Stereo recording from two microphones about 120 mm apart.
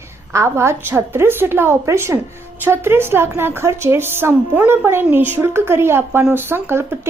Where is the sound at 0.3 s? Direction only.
20° right (ahead or behind).